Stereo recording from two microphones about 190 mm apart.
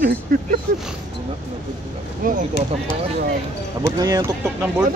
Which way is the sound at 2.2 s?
45° right (ahead or behind).